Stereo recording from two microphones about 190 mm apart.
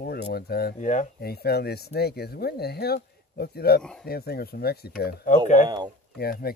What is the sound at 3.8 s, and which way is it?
Speech, 5° left (ahead or behind).